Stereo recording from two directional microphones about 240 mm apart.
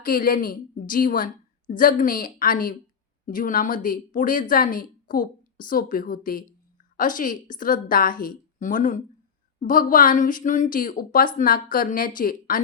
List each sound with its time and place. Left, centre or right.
0.0 s a woman's voice: left